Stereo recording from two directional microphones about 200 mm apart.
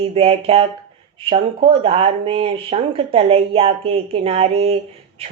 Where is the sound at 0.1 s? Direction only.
30° right (ahead or behind).